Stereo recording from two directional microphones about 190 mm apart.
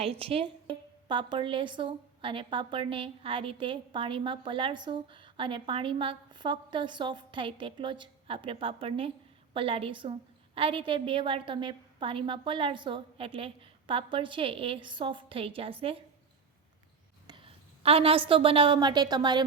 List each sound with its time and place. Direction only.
0.0 s a woman's voice: 30° right (ahead or behind)
17.2 s a woman's voice: 25° right (ahead or behind)